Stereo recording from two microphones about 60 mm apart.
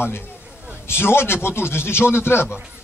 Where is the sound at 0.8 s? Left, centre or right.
Left.